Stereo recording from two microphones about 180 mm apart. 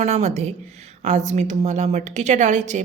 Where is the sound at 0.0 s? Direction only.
40° right (ahead or behind).